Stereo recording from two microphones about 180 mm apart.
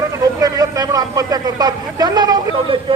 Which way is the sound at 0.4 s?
20° right (ahead or behind).